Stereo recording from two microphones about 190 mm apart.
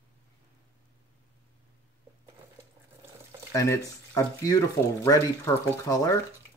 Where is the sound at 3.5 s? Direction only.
15° left (ahead or behind).